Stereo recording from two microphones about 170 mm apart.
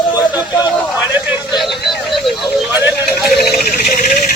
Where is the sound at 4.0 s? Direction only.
50° left (ahead or behind).